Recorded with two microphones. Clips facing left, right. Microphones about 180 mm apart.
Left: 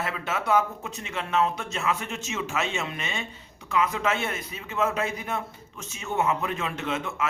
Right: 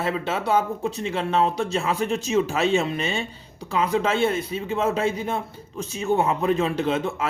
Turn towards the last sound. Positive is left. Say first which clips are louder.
# right 6 dB
turn(degrees=-30)  # may be behind; listen again after turning